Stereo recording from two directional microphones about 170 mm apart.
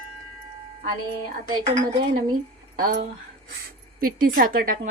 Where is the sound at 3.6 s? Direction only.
55° right (ahead or behind).